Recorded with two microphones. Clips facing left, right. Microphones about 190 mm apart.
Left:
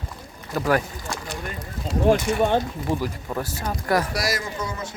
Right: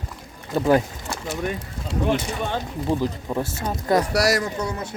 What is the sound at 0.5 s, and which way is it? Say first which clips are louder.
Speech: right 4 dB; 25° right (ahead or behind).